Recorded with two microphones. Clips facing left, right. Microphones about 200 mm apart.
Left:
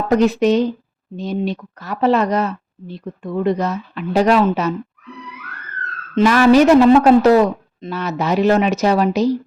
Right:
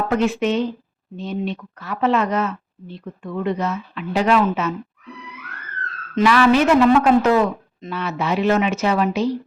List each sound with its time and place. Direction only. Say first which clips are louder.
0.1 s speech: left 7 dB; 40° left (ahead or behind)
6.2 s speech: left 4 dB; 40° left (ahead or behind)